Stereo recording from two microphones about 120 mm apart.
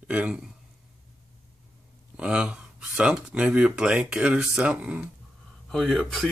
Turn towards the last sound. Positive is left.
turn(degrees=0)  # may be behind; listen again after turning